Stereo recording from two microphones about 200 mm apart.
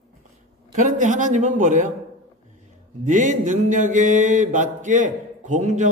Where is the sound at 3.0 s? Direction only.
40° right (ahead or behind).